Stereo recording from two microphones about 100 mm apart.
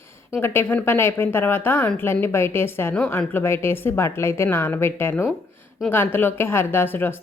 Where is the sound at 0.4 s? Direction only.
20° left (ahead or behind).